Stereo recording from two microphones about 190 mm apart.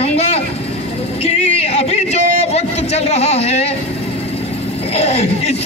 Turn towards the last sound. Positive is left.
turn(degrees=35)  # may be behind; listen again after turning